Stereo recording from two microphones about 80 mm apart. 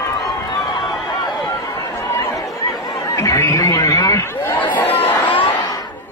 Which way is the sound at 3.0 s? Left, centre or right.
Left.